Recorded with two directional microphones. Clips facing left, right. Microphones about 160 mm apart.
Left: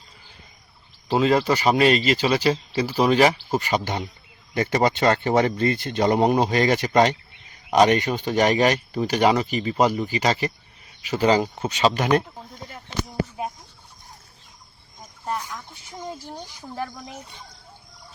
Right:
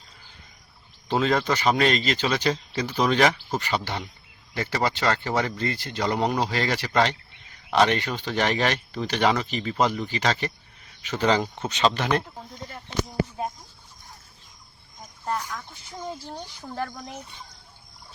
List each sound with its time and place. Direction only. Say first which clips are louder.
1.0 s speech: left 4 dB; 5° left (ahead or behind)
16.2 s speech: even; 10° left (ahead or behind)